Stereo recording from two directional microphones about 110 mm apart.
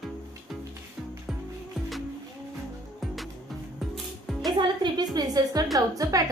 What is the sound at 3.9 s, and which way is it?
Music, centre (ahead or behind).